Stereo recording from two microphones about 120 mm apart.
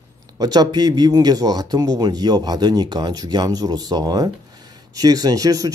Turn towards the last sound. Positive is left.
turn(degrees=-30)  # may be behind; listen again after turning